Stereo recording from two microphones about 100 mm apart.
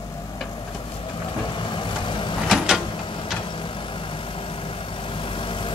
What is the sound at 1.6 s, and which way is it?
Vehicle, 55° left (ahead or behind).